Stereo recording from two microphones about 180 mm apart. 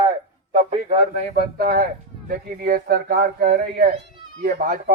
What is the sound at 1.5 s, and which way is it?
Speech, 55° right (ahead or behind).